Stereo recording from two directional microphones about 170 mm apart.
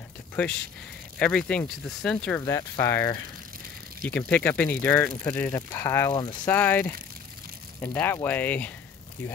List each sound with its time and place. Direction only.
1.1 s speech: 5° left (ahead or behind)
4.0 s speech: 5° left (ahead or behind)